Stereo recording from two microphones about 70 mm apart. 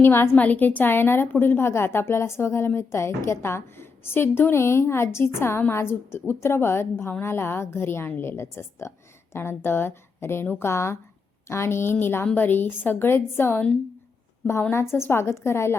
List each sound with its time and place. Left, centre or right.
0.0 s a woman's voice: left
0.3 s a woman's voice: left
14.7 s a woman's voice: left